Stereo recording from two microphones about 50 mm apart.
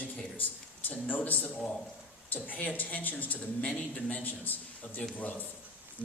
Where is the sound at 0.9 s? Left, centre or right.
Left.